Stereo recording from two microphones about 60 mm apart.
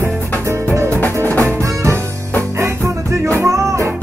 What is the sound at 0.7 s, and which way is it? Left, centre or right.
Music, right.